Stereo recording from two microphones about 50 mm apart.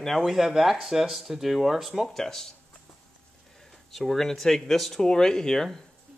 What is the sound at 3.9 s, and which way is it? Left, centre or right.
Speech, centre.